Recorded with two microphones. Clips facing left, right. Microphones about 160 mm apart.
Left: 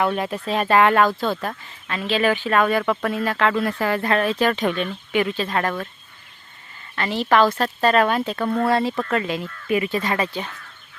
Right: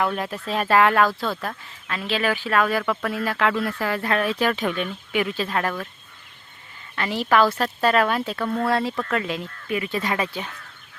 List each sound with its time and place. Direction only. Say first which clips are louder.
0.4 s speech: left 1 dB; centre (ahead or behind)
1.1 s speech: left 4 dB; 25° left (ahead or behind)
1.4 s speech: left 2 dB; centre (ahead or behind)
6.9 s speech: left 2 dB; 10° right (ahead or behind)
10.0 s speech: left 2 dB; 10° right (ahead or behind)